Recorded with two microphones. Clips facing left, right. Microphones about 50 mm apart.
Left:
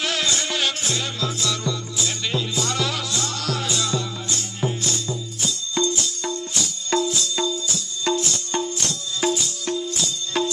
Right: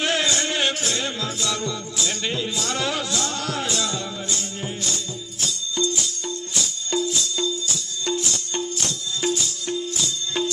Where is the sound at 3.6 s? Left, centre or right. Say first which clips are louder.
Left 1 dB; centre.